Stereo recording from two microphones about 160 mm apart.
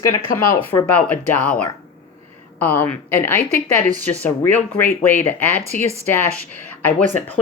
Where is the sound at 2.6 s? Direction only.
10° left (ahead or behind).